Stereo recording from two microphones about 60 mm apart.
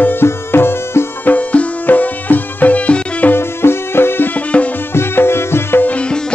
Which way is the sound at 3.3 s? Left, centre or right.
Left.